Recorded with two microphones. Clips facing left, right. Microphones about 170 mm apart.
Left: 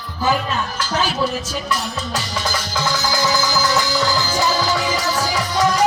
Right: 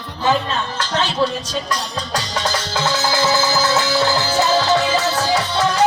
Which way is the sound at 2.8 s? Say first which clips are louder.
Right 2 dB; 25° right (ahead or behind).